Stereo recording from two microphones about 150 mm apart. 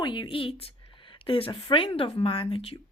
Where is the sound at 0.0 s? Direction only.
30° left (ahead or behind).